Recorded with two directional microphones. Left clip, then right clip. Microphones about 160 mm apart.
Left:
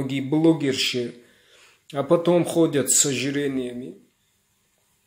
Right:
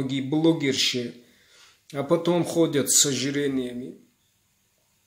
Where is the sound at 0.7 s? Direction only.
45° right (ahead or behind).